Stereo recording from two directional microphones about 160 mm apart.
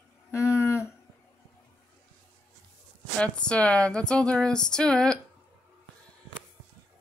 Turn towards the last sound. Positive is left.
turn(degrees=5)  # may be behind; listen again after turning